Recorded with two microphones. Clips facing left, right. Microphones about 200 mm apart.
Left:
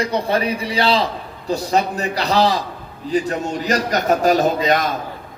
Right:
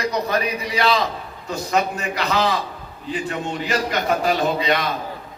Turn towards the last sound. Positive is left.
turn(degrees=45)  # may be behind; listen again after turning